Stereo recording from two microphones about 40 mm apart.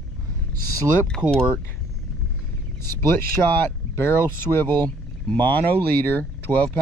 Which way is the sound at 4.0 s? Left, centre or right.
Left.